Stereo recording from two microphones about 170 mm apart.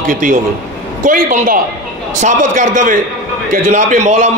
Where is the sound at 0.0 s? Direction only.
50° right (ahead or behind).